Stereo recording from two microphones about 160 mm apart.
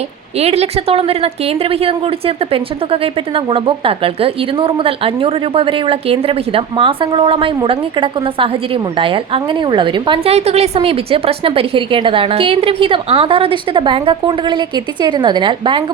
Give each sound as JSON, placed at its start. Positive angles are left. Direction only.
{"t": 0.3, "sound": "a woman's voice", "side_deg": -40}